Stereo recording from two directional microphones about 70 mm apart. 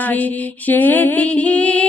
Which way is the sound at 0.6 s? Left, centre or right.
Left.